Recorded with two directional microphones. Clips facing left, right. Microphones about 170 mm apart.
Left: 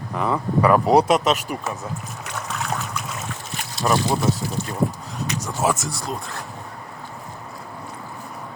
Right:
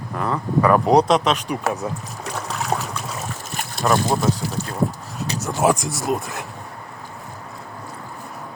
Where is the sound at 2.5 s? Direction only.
30° right (ahead or behind).